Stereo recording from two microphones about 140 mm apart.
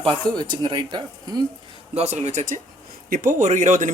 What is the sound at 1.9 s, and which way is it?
Speech, 55° right (ahead or behind).